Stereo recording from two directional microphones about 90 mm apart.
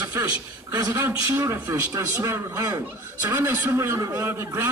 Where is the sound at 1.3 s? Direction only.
25° right (ahead or behind).